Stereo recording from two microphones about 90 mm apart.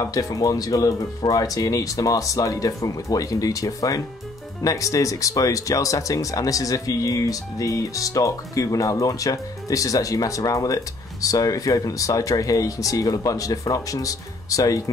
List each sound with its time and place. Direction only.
0.0 s speech: 40° left (ahead or behind)